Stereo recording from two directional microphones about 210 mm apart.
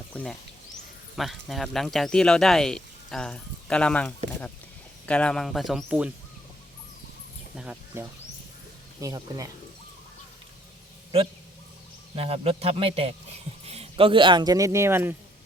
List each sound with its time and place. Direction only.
0.1 s speech: 5° left (ahead or behind)
7.5 s speech: 5° right (ahead or behind)
9.0 s speech: 15° right (ahead or behind)
12.1 s a man's voice: 30° right (ahead or behind); by 15.1 s 10° right (ahead or behind)